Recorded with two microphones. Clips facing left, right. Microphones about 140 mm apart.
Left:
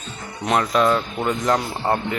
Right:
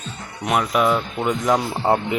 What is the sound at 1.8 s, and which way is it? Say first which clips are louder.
Speech: right 3 dB; 15° right (ahead or behind).